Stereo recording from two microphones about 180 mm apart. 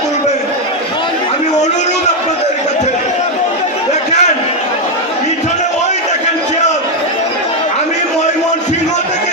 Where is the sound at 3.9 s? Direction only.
40° left (ahead or behind).